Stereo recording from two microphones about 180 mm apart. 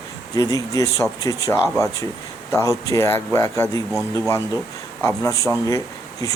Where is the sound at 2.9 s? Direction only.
15° left (ahead or behind).